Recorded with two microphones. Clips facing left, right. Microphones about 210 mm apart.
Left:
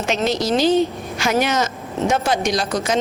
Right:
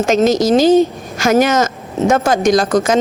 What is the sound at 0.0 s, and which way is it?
Speech, 45° right (ahead or behind).